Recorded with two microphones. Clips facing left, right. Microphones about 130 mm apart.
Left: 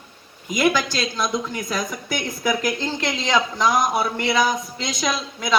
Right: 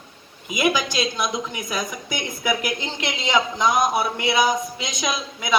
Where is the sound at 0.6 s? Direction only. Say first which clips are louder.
Left 1 dB; 15° right (ahead or behind).